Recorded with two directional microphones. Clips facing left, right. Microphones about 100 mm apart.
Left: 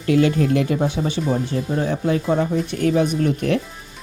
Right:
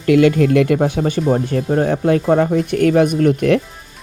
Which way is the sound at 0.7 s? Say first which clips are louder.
Right 4 dB; 55° right (ahead or behind).